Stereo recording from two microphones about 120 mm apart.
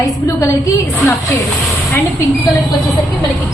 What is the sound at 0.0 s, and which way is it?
A woman's voice, 25° left (ahead or behind).